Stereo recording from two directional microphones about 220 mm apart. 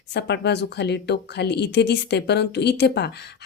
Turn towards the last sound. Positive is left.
turn(degrees=50)  # may be behind; listen again after turning